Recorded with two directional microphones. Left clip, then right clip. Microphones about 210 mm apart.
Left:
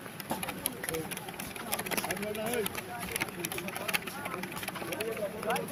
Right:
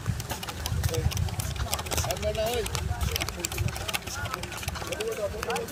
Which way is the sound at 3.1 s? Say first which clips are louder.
Right 4 dB; 10° right (ahead or behind).